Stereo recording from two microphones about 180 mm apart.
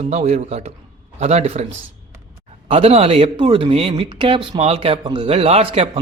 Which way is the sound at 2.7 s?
35° right (ahead or behind).